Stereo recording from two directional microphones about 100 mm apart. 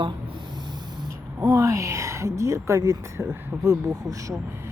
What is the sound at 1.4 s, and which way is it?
A woman's voice, 35° right (ahead or behind).